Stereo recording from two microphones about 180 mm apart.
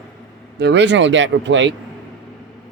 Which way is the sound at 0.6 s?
75° right (ahead or behind).